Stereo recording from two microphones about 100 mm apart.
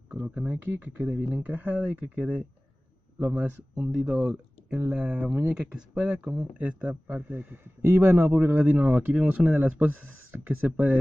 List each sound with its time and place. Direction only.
0.3 s speech: 15° right (ahead or behind)